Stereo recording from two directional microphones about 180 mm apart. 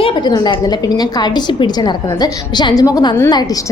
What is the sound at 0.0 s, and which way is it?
A woman's voice, 25° left (ahead or behind).